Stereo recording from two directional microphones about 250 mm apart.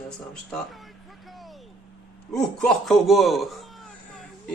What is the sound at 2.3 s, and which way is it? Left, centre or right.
A man's voice, centre.